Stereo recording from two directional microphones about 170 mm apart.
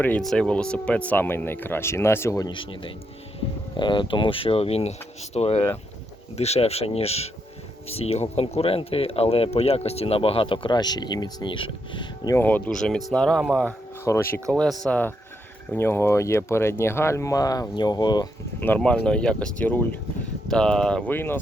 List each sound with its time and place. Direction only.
0.0 s speech: 5° left (ahead or behind)
14.0 s speech: 15° left (ahead or behind)
14.6 s speech: 5° left (ahead or behind); by 18.3 s 25° left (ahead or behind)
18.6 s speech: 10° left (ahead or behind)